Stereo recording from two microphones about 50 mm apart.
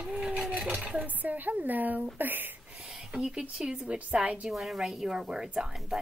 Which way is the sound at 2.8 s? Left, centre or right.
Centre.